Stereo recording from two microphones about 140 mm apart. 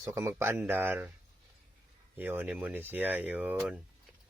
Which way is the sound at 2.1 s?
15° right (ahead or behind).